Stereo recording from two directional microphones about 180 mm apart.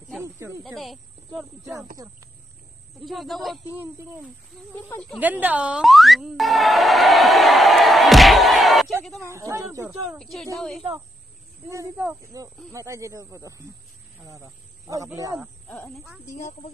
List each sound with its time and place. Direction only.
0.2 s snake: 15° right (ahead or behind)
0.7 s speech: centre (ahead or behind)
2.0 s speech: 20° right (ahead or behind)
3.1 s speech: centre (ahead or behind)
3.7 s speech: 10° right (ahead or behind)
4.7 s speech: 10° left (ahead or behind)
5.2 s music: 10° right (ahead or behind)
9.3 s speech: 15° right (ahead or behind)
9.8 s speech: centre (ahead or behind)
12.3 s speech: 20° right (ahead or behind)
14.9 s speech: 20° right (ahead or behind)
15.7 s speech: 5° left (ahead or behind)